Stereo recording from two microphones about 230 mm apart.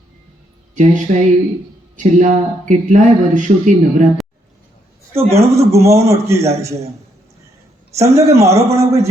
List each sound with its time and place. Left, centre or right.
0.8 s speech: right
5.1 s a man's voice: centre
7.9 s a man's voice: centre